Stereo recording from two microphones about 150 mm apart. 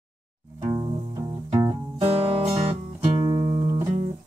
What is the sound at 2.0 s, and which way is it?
Music, 40° right (ahead or behind).